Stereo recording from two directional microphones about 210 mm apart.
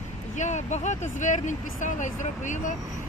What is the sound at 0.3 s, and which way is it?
Speech, 35° left (ahead or behind).